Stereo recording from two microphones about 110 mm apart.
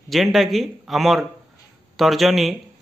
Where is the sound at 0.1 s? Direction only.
Centre (ahead or behind).